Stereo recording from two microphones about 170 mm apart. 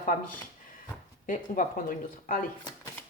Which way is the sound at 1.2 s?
50° left (ahead or behind).